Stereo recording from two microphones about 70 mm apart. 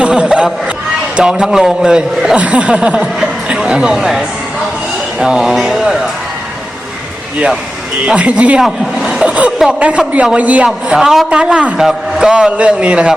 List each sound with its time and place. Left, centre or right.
0.0 s a sound: centre
1.1 s a man's voice: centre
5.2 s a man's voice: centre
8.0 s a man's voice: centre
8.6 s a man's voice: centre
9.2 s a sound: centre
9.6 s a man's voice: centre
10.8 s a man's voice: centre